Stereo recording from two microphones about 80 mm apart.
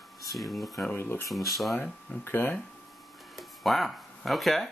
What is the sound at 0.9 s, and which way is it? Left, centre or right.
Speech, left.